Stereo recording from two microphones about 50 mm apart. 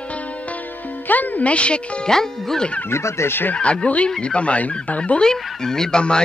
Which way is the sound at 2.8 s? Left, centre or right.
Left.